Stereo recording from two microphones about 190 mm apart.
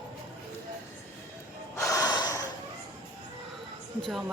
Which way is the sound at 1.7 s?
15° left (ahead or behind).